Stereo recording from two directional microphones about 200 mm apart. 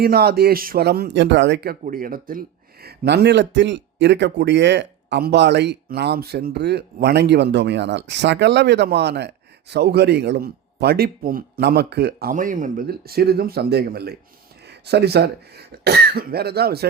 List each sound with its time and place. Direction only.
0.0 s speech: 50° right (ahead or behind)